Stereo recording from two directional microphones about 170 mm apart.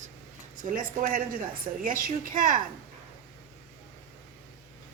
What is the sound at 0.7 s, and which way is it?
A woman's voice, 55° right (ahead or behind).